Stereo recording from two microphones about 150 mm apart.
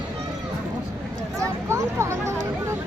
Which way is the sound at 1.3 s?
20° right (ahead or behind).